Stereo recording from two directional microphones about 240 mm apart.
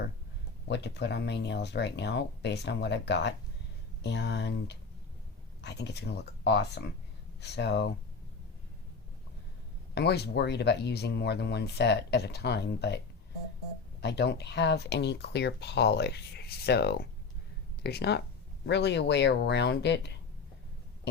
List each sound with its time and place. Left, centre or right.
0.7 s speech: left
9.9 s speech: left
14.0 s speech: left